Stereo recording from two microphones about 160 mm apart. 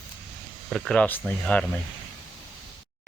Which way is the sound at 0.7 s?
5° left (ahead or behind).